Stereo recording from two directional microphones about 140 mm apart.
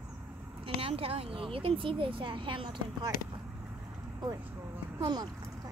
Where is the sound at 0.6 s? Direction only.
40° right (ahead or behind).